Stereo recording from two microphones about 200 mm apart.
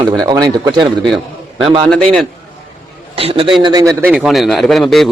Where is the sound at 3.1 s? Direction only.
30° right (ahead or behind); by 5.1 s centre (ahead or behind).